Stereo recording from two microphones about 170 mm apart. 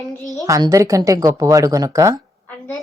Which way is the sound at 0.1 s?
20° left (ahead or behind).